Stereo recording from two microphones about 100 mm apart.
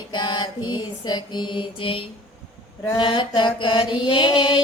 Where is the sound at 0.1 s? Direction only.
50° left (ahead or behind).